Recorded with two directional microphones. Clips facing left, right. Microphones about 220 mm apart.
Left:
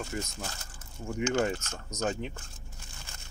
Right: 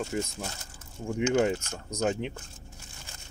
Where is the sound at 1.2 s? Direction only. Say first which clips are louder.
Right 4 dB; 15° right (ahead or behind).